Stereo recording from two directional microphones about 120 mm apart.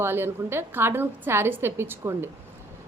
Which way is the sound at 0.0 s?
20° right (ahead or behind).